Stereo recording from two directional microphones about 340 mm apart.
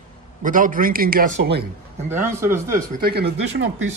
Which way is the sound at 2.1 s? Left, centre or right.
Centre.